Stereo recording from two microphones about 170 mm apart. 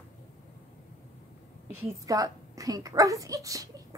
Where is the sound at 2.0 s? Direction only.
20° right (ahead or behind).